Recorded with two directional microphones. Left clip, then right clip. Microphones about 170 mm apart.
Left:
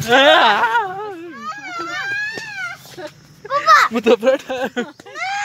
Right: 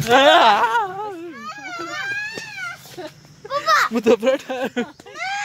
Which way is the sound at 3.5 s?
25° left (ahead or behind).